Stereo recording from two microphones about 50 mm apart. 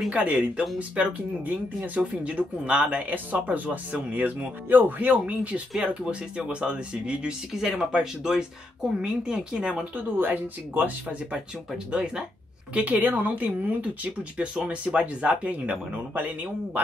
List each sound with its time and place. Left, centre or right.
0.1 s speech: right
10.1 s speech: right
11.9 s speech: right